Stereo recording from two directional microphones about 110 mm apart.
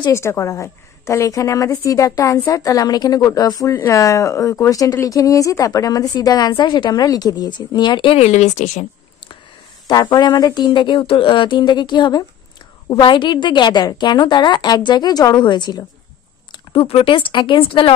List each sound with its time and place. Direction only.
0.1 s a woman's voice: 25° left (ahead or behind); by 8.2 s 45° left (ahead or behind)
8.2 s speech: 85° left
9.8 s speech: 40° left (ahead or behind)
16.5 s speech: 60° left (ahead or behind)